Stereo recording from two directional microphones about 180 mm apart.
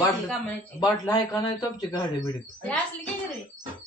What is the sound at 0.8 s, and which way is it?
A man's voice, 20° left (ahead or behind).